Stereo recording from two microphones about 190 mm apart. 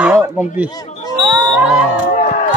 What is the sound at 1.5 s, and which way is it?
Music, 5° right (ahead or behind).